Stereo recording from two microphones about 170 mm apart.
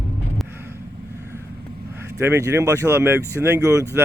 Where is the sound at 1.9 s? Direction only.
15° right (ahead or behind).